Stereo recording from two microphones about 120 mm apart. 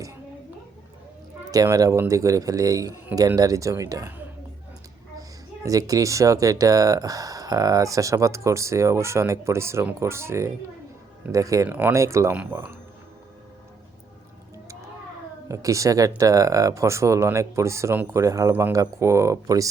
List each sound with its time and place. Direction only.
1.5 s speech: 30° right (ahead or behind)
5.6 s speech: 30° right (ahead or behind)
15.4 s speech: 25° right (ahead or behind)